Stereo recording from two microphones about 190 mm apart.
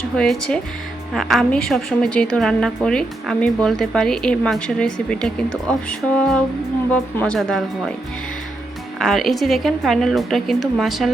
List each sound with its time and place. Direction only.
0.2 s a woman's voice: 5° left (ahead or behind)
9.0 s a woman's voice: centre (ahead or behind)